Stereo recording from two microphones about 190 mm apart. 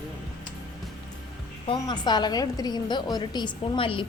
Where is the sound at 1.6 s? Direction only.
25° left (ahead or behind).